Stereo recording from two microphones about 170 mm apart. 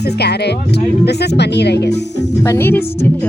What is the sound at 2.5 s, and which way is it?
Music, 15° left (ahead or behind).